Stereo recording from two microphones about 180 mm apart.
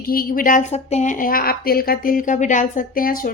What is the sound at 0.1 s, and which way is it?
Speech, 55° left (ahead or behind).